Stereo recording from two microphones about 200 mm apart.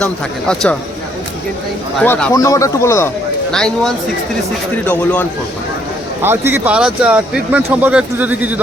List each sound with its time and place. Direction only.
0.0 s speech: 5° left (ahead or behind)
2.0 s speech: 5° left (ahead or behind)
2.3 s a man's voice: 15° left (ahead or behind)
3.5 s a man's voice: 5° left (ahead or behind)
6.2 s speech: 10° right (ahead or behind)